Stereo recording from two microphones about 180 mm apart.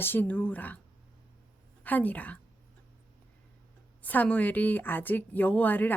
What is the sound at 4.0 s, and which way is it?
A woman's voice, 10° left (ahead or behind).